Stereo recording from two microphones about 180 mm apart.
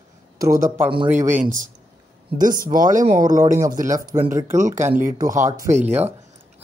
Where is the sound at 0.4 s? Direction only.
15° right (ahead or behind).